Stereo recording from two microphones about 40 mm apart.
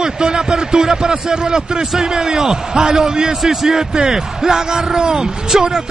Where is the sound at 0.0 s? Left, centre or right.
Centre.